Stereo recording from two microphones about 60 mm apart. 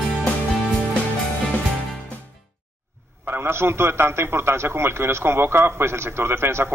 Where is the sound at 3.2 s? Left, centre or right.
Right.